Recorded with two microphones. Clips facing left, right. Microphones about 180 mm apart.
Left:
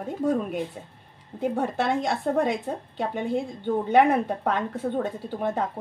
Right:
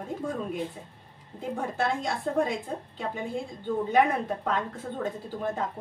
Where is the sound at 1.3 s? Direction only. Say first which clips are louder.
Left 5 dB; 70° left (ahead or behind).